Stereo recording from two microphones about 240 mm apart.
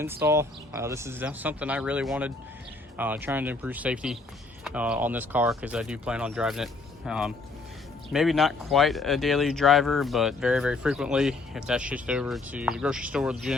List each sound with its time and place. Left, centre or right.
0.0 s speech: centre